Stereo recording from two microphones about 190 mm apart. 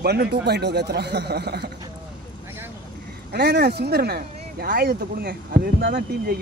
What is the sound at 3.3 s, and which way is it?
Speech, 55° right (ahead or behind).